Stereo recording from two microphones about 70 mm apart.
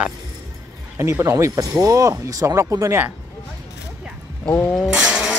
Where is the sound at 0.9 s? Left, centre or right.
Right.